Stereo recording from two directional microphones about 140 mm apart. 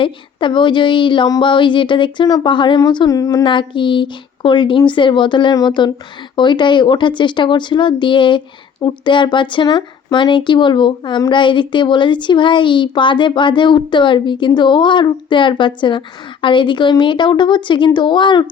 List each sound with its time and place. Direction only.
0.0 s speech: 35° left (ahead or behind)